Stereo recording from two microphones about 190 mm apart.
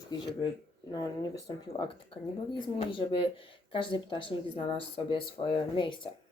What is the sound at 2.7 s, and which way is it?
Speech, 25° left (ahead or behind).